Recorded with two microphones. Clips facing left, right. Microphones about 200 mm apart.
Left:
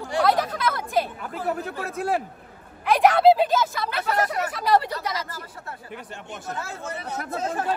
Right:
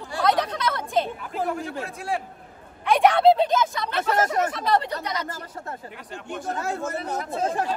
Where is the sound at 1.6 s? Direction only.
55° left (ahead or behind).